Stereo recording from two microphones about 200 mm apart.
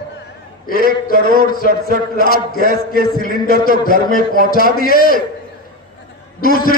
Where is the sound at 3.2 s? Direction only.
45° left (ahead or behind).